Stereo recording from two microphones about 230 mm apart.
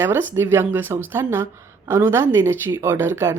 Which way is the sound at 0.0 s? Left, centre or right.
Centre.